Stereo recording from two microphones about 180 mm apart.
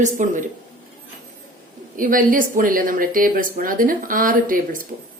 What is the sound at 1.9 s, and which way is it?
Speech, 50° right (ahead or behind).